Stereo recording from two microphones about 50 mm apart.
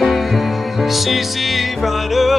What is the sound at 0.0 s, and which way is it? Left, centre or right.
Music, centre.